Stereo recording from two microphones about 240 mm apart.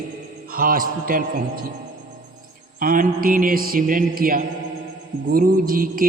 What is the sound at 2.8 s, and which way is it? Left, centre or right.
Music, right.